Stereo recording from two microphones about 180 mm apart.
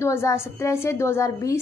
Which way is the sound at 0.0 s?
15° left (ahead or behind).